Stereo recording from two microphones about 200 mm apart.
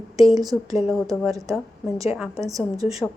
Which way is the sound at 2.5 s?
15° right (ahead or behind).